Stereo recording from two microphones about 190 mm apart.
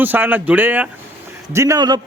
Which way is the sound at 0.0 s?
10° right (ahead or behind).